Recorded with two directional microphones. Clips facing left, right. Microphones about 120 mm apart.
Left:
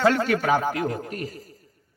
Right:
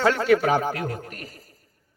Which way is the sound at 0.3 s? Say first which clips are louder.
Right 2 dB; 40° left (ahead or behind).